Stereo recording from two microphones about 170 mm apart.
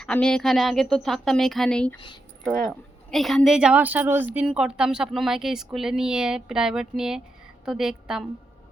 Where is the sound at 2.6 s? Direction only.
Centre (ahead or behind).